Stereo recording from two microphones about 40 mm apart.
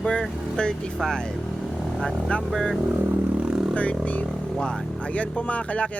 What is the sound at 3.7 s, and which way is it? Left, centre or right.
Speech, left.